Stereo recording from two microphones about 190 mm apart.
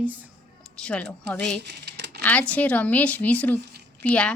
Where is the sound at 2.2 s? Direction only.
10° left (ahead or behind).